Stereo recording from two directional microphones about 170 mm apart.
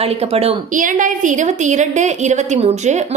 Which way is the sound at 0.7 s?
50° right (ahead or behind).